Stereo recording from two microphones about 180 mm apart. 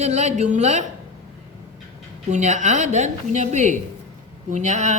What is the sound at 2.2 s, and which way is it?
A man's voice, 40° right (ahead or behind).